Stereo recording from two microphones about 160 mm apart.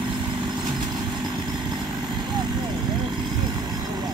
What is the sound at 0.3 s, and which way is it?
Vehicle, 25° right (ahead or behind).